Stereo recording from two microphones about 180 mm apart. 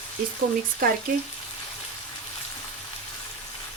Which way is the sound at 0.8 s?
50° right (ahead or behind).